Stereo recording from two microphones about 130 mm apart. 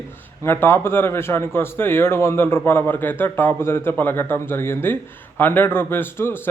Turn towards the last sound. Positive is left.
turn(degrees=15)  # may be behind; listen again after turning